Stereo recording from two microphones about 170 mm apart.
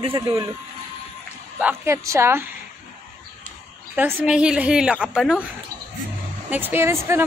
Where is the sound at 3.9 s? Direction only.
5° right (ahead or behind).